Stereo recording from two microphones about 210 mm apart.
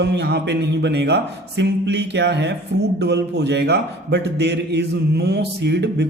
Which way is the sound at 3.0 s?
55° right (ahead or behind).